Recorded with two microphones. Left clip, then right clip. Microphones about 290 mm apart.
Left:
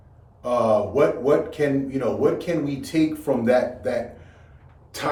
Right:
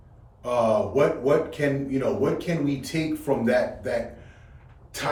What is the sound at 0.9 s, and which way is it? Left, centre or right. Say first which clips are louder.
A man's voice: left 2 dB; centre.